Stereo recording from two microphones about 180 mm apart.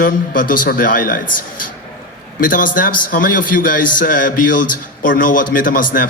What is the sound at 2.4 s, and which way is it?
A man's voice, 50° left (ahead or behind).